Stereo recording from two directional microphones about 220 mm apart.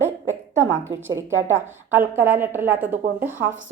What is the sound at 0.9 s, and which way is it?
A woman's voice, 10° right (ahead or behind).